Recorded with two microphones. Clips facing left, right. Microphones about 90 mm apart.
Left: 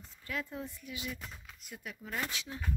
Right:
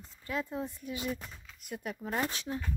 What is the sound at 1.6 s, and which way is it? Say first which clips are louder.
Speech: right 8 dB; 45° right (ahead or behind).